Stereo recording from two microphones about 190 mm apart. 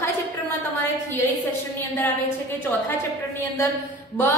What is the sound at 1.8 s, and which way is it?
Speech, 10° left (ahead or behind).